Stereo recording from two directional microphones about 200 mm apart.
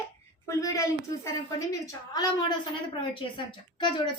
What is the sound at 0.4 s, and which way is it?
A woman's voice, 15° left (ahead or behind).